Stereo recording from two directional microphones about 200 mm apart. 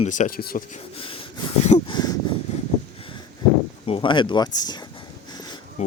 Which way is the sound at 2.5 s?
35° left (ahead or behind).